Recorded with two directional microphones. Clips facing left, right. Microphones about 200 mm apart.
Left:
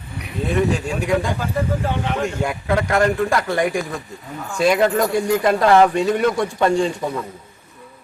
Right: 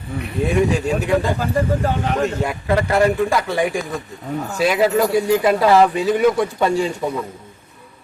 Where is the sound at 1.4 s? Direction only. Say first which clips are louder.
Right 3 dB; 40° right (ahead or behind).